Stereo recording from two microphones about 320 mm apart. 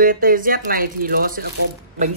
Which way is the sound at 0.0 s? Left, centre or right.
Right.